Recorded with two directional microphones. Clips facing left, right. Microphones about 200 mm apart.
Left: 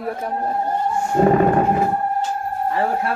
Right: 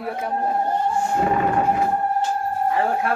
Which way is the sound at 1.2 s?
45° left (ahead or behind).